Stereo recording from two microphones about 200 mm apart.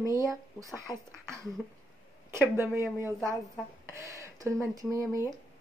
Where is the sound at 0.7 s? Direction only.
15° right (ahead or behind).